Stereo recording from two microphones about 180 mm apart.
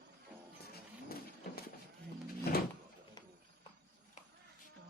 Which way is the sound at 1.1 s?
60° left (ahead or behind).